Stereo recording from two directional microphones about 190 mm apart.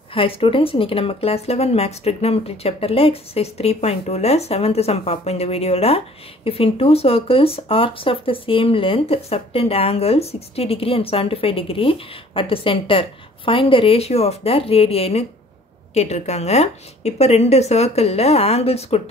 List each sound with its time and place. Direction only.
0.1 s speech: 30° left (ahead or behind)